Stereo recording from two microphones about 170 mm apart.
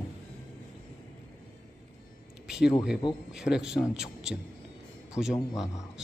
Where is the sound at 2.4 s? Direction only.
5° right (ahead or behind).